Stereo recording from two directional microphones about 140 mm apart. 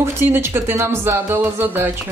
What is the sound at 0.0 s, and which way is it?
Speech, 20° right (ahead or behind).